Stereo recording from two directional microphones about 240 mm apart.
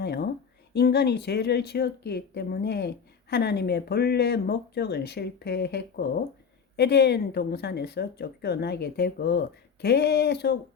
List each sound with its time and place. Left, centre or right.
0.0 s a woman's voice: left